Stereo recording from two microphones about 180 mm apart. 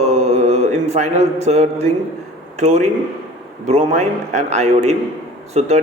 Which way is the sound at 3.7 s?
35° right (ahead or behind).